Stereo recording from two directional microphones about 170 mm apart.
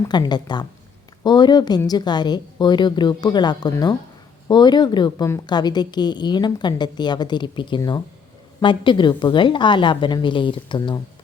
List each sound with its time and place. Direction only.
0.1 s a woman's voice: 25° left (ahead or behind)